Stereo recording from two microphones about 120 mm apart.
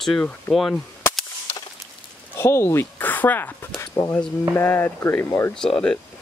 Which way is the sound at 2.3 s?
20° left (ahead or behind).